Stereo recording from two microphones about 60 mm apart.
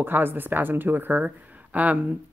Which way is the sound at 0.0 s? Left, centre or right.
Right.